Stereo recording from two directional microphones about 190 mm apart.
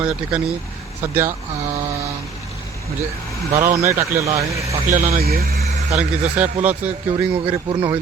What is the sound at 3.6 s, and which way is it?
Speech, 15° right (ahead or behind).